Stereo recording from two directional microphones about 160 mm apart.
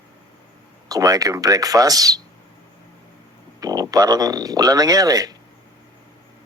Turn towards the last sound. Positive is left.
turn(degrees=-25)  # may be behind; listen again after turning